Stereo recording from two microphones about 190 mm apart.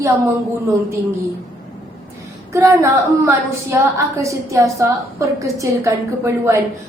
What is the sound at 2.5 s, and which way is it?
A woman's voice, 15° right (ahead or behind).